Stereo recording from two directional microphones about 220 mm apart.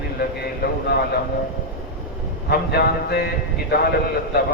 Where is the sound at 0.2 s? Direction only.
45° left (ahead or behind).